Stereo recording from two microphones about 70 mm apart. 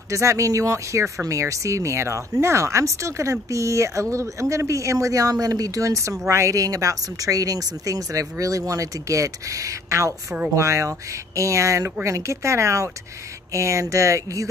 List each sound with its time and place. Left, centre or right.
0.1 s speech: right